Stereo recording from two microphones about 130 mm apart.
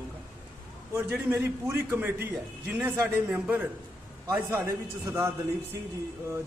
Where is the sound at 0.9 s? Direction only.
20° right (ahead or behind).